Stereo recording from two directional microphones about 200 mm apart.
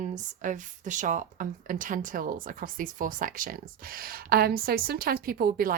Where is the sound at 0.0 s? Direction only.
40° right (ahead or behind).